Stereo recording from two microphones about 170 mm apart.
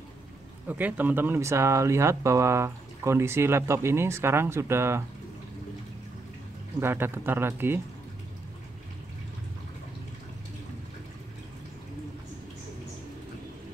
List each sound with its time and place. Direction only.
0.7 s speech: 10° right (ahead or behind)
6.8 s speech: 15° right (ahead or behind)